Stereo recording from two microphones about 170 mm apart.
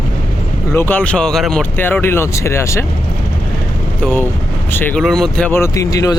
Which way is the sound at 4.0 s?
10° left (ahead or behind).